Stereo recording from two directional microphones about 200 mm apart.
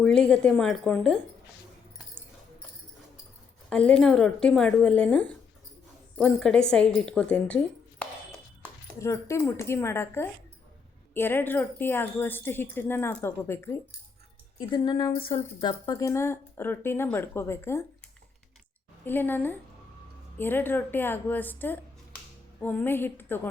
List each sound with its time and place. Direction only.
0.0 s a woman's voice: 5° left (ahead or behind)
3.7 s a woman's voice: 5° left (ahead or behind)
9.0 s a woman's voice: 15° left (ahead or behind)
19.0 s a woman's voice: 10° left (ahead or behind)